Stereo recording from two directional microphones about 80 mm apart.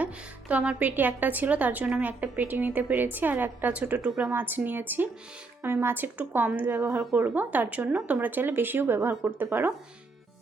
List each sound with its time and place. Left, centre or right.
0.0 s a woman's voice: centre